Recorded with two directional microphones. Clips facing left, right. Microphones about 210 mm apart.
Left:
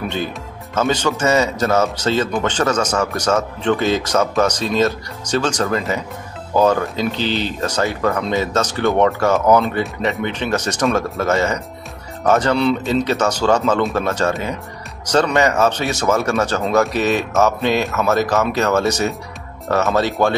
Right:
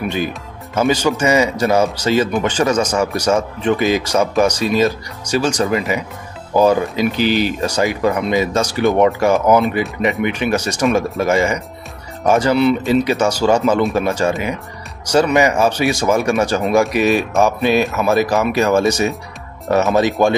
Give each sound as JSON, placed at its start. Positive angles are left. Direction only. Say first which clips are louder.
{"t": 0.7, "sound": "speech", "louder": "right 3 dB", "side_deg": -10}